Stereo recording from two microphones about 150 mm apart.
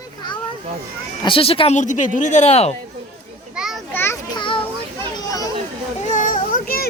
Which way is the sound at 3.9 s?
15° left (ahead or behind).